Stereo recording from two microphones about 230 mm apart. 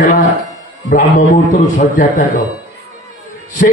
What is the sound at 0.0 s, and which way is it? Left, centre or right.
Speech, left.